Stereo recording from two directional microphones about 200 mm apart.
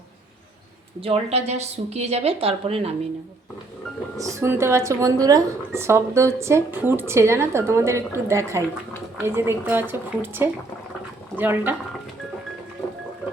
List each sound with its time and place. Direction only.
1.0 s a woman's voice: 30° right (ahead or behind)
4.2 s a woman's voice: 15° right (ahead or behind)